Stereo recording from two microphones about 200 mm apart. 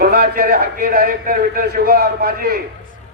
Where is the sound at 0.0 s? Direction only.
50° right (ahead or behind).